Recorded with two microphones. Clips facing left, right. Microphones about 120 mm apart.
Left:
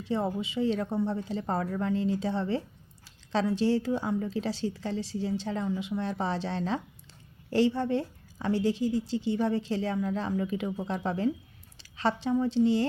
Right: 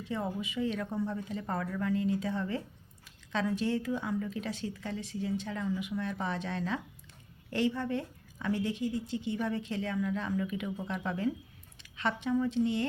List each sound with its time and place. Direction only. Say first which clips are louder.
0.0 s a woman's voice: left 5 dB; 30° left (ahead or behind)